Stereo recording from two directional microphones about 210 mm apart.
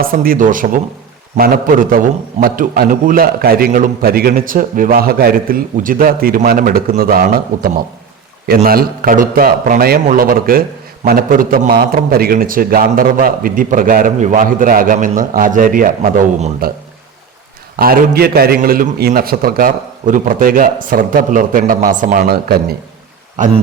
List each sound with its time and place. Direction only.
0.0 s a man's voice: 45° right (ahead or behind)
17.7 s a man's voice: 45° right (ahead or behind)